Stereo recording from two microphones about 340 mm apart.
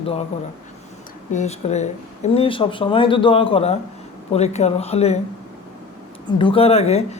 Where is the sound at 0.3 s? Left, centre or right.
Centre.